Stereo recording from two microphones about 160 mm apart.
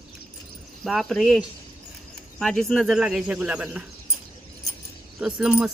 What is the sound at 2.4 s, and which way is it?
Speech, 5° left (ahead or behind).